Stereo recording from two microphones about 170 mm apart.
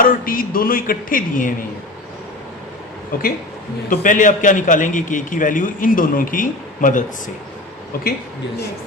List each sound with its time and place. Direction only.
0.0 s speech: 55° left (ahead or behind)
3.8 s a man's voice: 50° left (ahead or behind)